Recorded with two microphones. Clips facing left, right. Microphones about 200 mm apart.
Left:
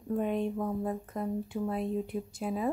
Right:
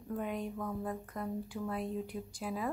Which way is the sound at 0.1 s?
25° left (ahead or behind).